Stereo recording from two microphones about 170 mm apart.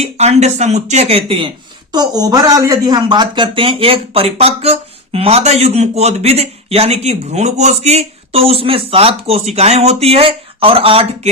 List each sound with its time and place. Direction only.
0.0 s speech: 40° right (ahead or behind)
1.9 s speech: 25° right (ahead or behind)